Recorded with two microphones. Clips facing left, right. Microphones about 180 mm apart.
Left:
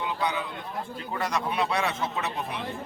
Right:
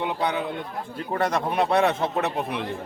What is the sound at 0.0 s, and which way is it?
A man's voice, 60° right (ahead or behind).